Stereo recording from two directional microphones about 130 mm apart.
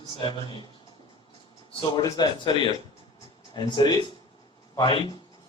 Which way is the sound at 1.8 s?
30° left (ahead or behind).